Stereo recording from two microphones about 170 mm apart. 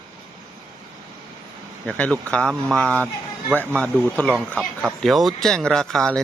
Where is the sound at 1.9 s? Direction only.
10° left (ahead or behind).